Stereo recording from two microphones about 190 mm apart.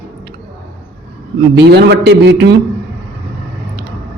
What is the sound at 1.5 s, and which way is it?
A man's voice, 60° right (ahead or behind).